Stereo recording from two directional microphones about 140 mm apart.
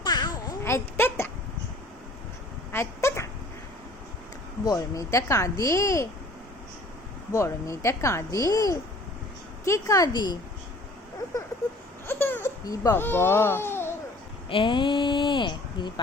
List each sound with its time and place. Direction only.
0.0 s babbling: 30° left (ahead or behind)
0.6 s a sound: 15° left (ahead or behind)
2.7 s dog: 20° left (ahead or behind)
4.6 s speech: 25° left (ahead or behind)
7.3 s speech: 20° left (ahead or behind)
12.0 s a sound: 15° left (ahead or behind)
12.9 s speech: 15° left (ahead or behind)
14.5 s speech: 35° left (ahead or behind)